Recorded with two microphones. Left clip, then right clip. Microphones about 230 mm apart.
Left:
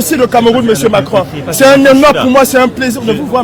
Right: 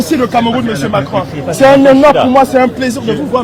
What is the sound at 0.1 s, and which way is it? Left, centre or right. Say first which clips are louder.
Speech: left 5 dB; left.